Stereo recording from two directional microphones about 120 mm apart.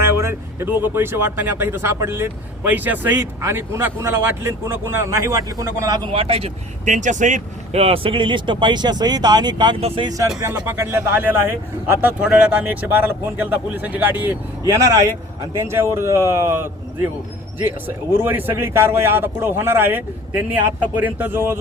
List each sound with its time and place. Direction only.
0.0 s speech: 20° right (ahead or behind)
6.1 s speech: 55° right (ahead or behind)
6.8 s speech: 90° right; by 9.7 s 40° right (ahead or behind)
9.8 s speech: 50° right (ahead or behind)
10.1 s speech: 30° right (ahead or behind)
12.2 s speech: 10° right (ahead or behind)
14.6 s speech: 25° right (ahead or behind)
18.2 s speech: 15° right (ahead or behind)